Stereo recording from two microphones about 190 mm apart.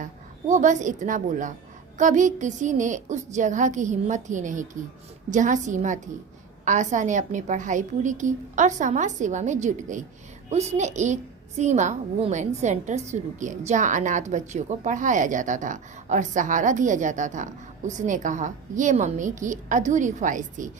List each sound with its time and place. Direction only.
0.0 s a woman's voice: 40° right (ahead or behind)